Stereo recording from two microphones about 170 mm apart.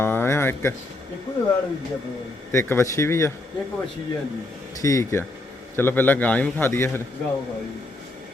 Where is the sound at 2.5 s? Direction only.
15° left (ahead or behind).